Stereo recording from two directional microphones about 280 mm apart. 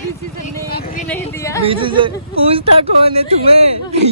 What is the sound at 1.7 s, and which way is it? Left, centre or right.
Speech, centre.